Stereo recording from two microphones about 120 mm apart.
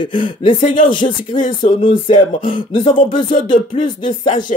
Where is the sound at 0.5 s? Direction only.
90° left.